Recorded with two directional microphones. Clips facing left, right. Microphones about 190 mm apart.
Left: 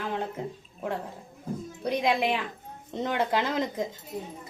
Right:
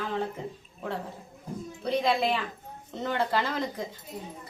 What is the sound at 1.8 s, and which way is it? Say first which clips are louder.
A woman's voice: even; 15° left (ahead or behind).